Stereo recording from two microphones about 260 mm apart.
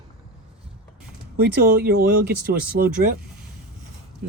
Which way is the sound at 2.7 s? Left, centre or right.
Right.